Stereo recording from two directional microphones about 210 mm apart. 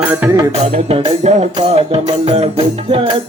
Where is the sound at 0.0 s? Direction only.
10° right (ahead or behind).